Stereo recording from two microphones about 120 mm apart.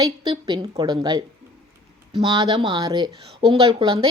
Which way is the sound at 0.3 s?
40° right (ahead or behind).